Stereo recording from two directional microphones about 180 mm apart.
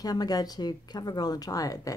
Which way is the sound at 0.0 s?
20° left (ahead or behind).